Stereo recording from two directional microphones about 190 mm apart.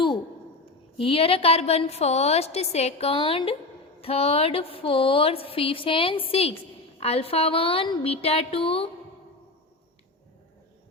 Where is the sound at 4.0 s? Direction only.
30° left (ahead or behind).